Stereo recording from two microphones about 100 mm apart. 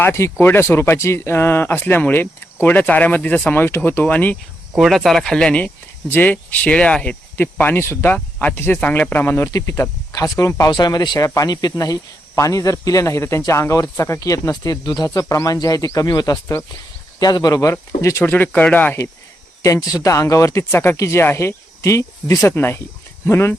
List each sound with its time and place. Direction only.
0.0 s speech: 25° left (ahead or behind)
4.8 s speech: centre (ahead or behind)
19.6 s speech: 35° left (ahead or behind)